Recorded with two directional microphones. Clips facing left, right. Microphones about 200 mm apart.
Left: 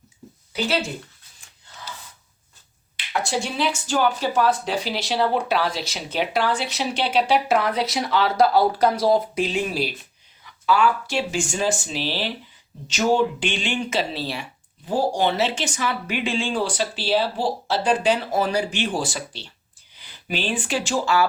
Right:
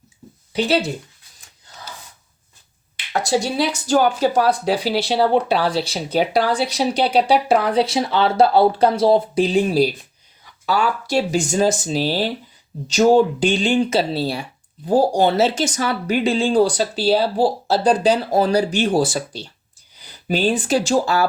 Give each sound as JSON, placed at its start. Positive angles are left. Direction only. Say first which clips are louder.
{"t": 3.1, "sound": "speech", "louder": "right 5 dB", "side_deg": -40}